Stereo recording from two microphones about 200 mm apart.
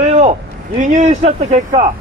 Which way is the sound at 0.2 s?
35° right (ahead or behind).